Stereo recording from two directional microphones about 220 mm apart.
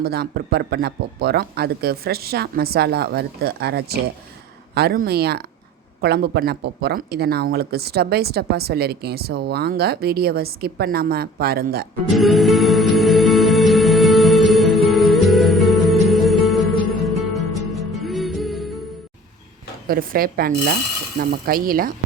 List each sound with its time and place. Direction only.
0.0 s speech: 45° right (ahead or behind)
12.1 s music: centre (ahead or behind)
19.9 s speech: 40° right (ahead or behind)